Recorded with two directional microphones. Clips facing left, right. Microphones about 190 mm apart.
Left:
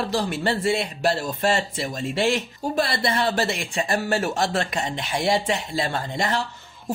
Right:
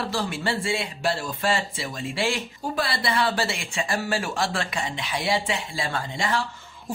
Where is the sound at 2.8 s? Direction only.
45° left (ahead or behind).